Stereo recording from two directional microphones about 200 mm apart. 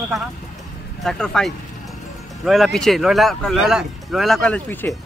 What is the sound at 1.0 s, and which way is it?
Speech, centre (ahead or behind).